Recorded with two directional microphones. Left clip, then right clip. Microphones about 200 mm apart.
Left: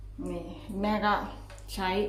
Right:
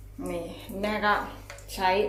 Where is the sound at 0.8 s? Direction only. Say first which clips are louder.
Right 2 dB; 10° left (ahead or behind).